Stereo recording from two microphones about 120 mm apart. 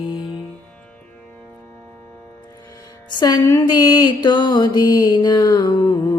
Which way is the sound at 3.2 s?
30° left (ahead or behind).